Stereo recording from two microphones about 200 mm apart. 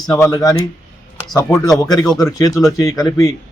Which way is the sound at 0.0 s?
15° left (ahead or behind).